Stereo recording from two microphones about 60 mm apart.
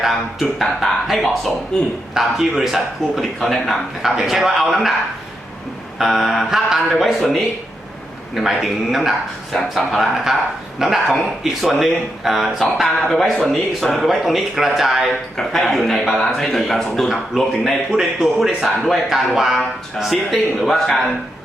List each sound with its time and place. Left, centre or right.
0.0 s speech: centre
6.0 s speech: centre